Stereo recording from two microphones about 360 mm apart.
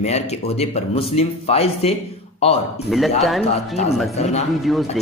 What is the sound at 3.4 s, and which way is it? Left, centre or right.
Speech, centre.